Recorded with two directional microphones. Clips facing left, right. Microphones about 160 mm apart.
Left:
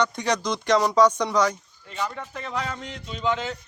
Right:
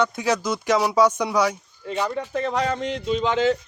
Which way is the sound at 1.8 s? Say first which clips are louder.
Right 6 dB; 80° right.